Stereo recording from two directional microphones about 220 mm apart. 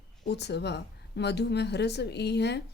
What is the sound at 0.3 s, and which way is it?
A woman's voice, 50° left (ahead or behind).